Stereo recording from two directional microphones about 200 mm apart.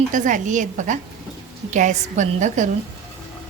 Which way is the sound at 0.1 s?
40° right (ahead or behind).